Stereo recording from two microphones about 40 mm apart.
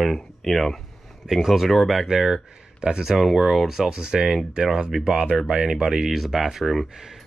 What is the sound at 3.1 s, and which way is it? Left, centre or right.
Speech, centre.